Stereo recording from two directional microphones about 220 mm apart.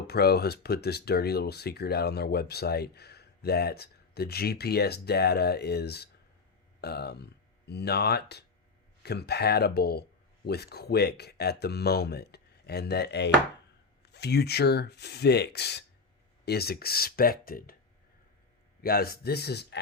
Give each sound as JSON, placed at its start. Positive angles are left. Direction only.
{"t": 0.1, "sound": "speech", "side_deg": 45}
{"t": 18.8, "sound": "speech", "side_deg": 45}